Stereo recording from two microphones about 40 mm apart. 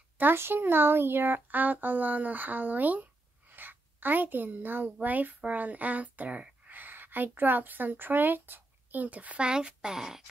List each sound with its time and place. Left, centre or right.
0.3 s speech: right
9.5 s a woman's voice: right